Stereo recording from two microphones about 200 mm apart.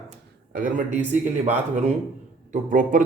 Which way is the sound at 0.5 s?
40° right (ahead or behind).